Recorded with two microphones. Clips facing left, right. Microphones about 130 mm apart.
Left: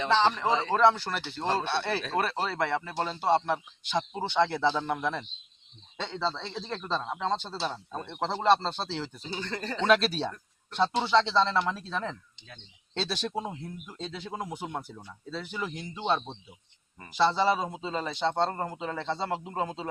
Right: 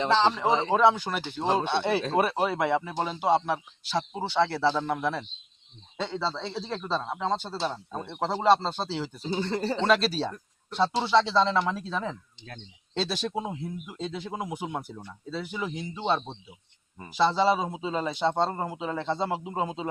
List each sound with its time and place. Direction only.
0.3 s speech: 15° right (ahead or behind)
9.3 s speech: 25° right (ahead or behind)
9.8 s speech: centre (ahead or behind)